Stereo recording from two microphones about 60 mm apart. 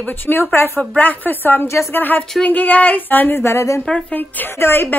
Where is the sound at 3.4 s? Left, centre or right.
Left.